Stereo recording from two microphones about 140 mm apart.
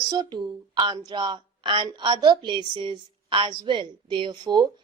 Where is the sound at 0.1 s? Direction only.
30° right (ahead or behind).